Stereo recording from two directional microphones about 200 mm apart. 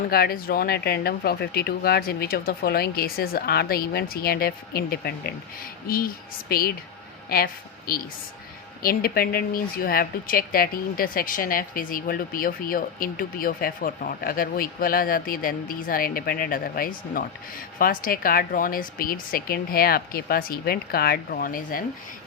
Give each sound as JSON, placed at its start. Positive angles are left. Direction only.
{"t": 0.1, "sound": "a woman's voice", "side_deg": 50}